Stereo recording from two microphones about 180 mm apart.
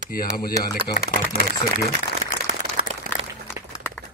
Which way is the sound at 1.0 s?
60° right (ahead or behind).